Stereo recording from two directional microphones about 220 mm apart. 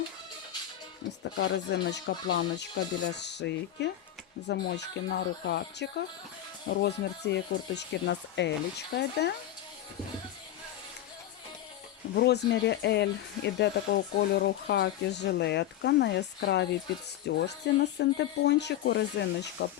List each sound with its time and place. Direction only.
1.2 s speech: 50° left (ahead or behind)
12.1 s speech: 50° left (ahead or behind)